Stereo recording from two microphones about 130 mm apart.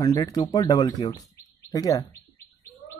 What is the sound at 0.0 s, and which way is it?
Speech, 30° left (ahead or behind).